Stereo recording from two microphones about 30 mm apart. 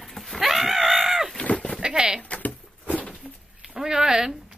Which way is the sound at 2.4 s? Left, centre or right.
Left.